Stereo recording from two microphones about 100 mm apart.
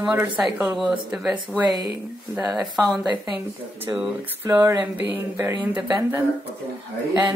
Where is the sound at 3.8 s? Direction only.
15° right (ahead or behind).